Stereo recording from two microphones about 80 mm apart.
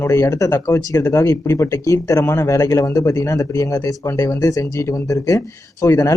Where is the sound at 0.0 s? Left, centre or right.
Left.